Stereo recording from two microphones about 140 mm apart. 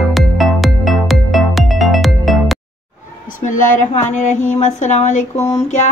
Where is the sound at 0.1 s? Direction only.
Centre (ahead or behind).